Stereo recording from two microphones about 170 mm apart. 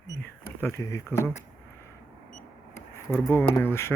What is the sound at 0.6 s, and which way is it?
Speech, 20° left (ahead or behind).